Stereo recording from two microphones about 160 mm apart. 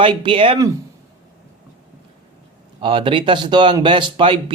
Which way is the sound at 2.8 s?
30° right (ahead or behind).